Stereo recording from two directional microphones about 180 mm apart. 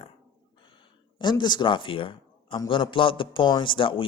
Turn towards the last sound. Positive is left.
turn(degrees=30)  # may be behind; listen again after turning